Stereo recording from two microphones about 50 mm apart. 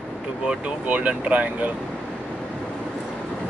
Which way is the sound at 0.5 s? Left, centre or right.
Right.